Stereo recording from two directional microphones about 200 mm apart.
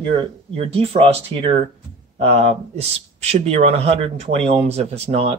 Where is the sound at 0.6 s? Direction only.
30° right (ahead or behind).